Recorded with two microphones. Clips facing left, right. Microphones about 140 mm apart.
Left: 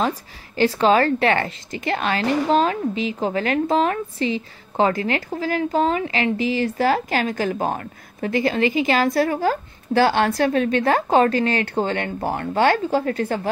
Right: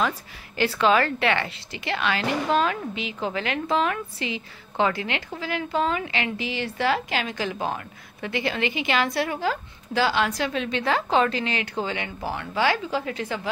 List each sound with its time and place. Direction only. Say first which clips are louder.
0.6 s a woman's voice: left 4 dB; 40° left (ahead or behind)